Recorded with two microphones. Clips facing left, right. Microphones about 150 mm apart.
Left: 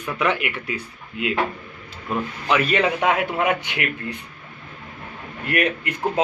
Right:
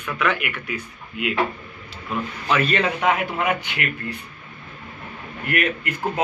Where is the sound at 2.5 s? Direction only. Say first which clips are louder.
Left 1 dB; 10° left (ahead or behind).